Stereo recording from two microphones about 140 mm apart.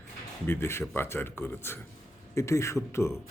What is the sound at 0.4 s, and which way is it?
Speech, 20° left (ahead or behind).